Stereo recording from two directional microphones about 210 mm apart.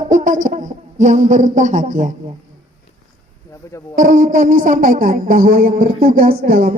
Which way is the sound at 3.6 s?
15° left (ahead or behind).